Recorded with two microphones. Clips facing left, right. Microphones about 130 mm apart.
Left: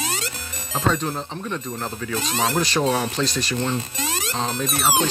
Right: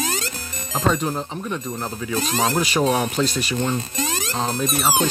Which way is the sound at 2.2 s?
40° right (ahead or behind).